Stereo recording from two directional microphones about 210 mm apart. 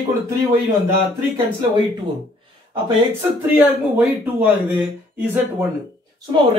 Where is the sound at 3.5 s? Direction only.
10° right (ahead or behind).